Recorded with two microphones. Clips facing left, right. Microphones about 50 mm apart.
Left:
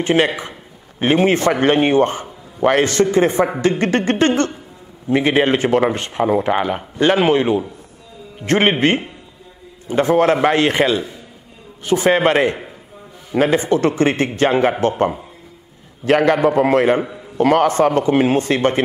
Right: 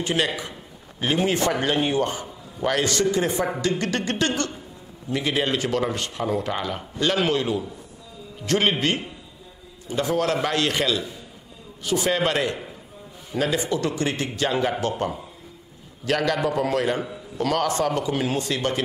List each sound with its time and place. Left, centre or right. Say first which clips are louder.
0.0 s a man's voice: left 8 dB; left